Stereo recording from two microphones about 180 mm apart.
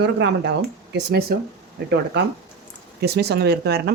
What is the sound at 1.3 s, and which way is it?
Speech, 55° right (ahead or behind).